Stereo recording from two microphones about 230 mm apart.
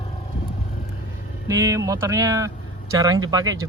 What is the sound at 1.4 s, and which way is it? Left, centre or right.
Speech, centre.